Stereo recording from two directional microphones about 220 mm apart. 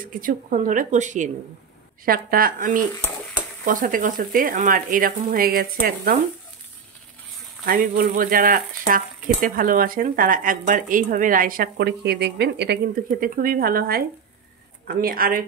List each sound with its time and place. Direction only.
0.2 s speech: 40° right (ahead or behind)
7.6 s speech: 40° right (ahead or behind)